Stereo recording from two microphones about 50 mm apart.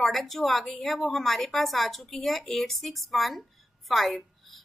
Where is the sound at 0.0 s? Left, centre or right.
Centre.